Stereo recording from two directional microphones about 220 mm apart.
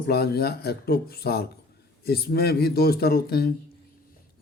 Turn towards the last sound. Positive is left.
turn(degrees=45)  # may be behind; listen again after turning